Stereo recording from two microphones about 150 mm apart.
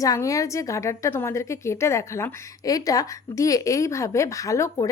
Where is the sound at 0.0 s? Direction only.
20° left (ahead or behind).